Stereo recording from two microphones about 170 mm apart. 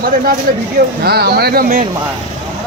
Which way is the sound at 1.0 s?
70° right (ahead or behind).